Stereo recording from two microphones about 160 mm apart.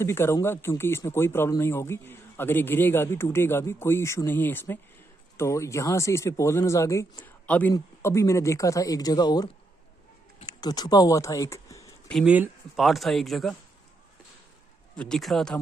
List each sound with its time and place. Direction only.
0.0 s speech: 15° left (ahead or behind)
12.3 s speech: 5° right (ahead or behind)
15.0 s speech: 5° left (ahead or behind)